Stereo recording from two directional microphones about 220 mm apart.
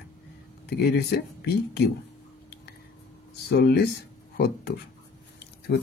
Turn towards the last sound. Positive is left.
turn(degrees=50)  # may be behind; listen again after turning